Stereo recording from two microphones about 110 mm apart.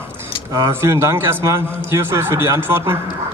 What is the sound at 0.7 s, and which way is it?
A man's voice, 20° right (ahead or behind).